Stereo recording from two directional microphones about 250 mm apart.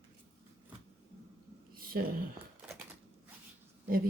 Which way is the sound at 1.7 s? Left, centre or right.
Right.